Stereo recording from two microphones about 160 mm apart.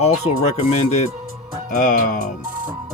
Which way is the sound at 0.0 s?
45° left (ahead or behind).